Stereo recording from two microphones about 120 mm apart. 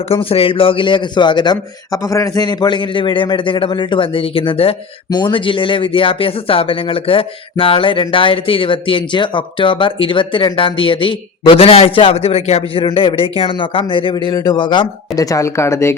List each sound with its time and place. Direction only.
0.1 s speech: 50° left (ahead or behind)
2.0 s speech: 25° left (ahead or behind)